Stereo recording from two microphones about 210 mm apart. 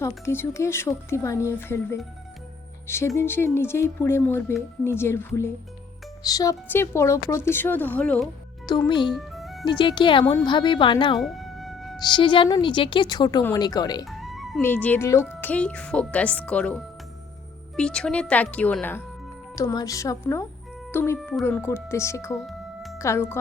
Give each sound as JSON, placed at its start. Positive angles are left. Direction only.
{"t": 0.0, "sound": "speech", "side_deg": 10}
{"t": 8.6, "sound": "speech", "side_deg": 20}
{"t": 9.1, "sound": "music", "side_deg": 0}
{"t": 9.6, "sound": "speech", "side_deg": 20}
{"t": 11.2, "sound": "music", "side_deg": 0}
{"t": 11.9, "sound": "speech", "side_deg": 20}
{"t": 14.0, "sound": "music", "side_deg": 0}
{"t": 14.6, "sound": "a woman's voice", "side_deg": 10}
{"t": 22.4, "sound": "music", "side_deg": 0}
{"t": 23.0, "sound": "speech", "side_deg": 15}